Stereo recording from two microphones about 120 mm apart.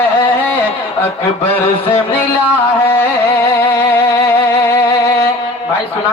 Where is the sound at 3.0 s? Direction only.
15° left (ahead or behind).